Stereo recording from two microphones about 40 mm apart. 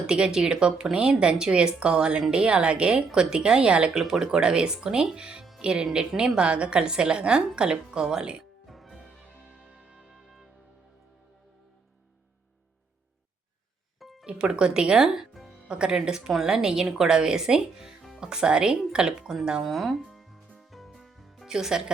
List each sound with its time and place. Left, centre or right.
0.1 s a woman's voice: centre
4.0 s a woman's voice: centre
8.6 s music: centre
9.3 s music: right
10.2 s music: centre
14.0 s music: centre
14.3 s a woman's voice: right
15.3 s music: centre
15.6 s a woman's voice: right
19.6 s speech: centre
20.1 s music: centre
21.4 s speech: centre